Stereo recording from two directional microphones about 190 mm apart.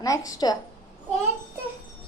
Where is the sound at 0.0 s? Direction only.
20° left (ahead or behind).